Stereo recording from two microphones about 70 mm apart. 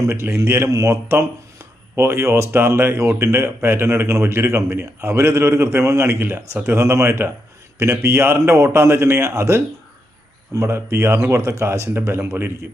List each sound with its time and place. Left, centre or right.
0.1 s a man's voice: right